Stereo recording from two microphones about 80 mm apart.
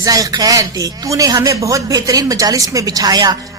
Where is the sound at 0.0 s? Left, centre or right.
Right.